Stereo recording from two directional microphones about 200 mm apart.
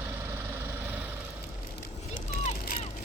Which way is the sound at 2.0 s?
35° left (ahead or behind).